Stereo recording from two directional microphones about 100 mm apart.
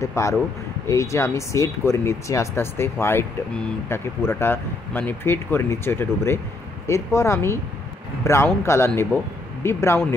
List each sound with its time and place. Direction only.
0.0 s speech: 30° left (ahead or behind)